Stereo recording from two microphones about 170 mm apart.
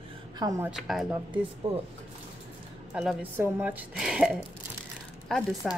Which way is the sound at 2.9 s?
Centre (ahead or behind).